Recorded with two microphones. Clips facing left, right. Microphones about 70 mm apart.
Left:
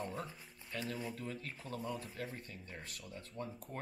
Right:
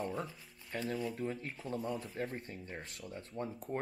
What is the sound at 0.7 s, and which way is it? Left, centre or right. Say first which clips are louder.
Speech: right 4 dB; right.